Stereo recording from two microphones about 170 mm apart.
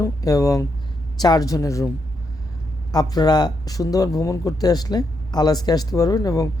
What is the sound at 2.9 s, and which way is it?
Speech, 20° left (ahead or behind).